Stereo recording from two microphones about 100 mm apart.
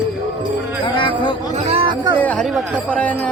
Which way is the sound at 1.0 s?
55° left (ahead or behind).